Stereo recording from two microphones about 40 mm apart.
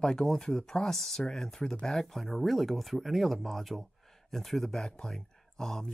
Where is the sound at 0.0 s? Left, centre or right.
Centre.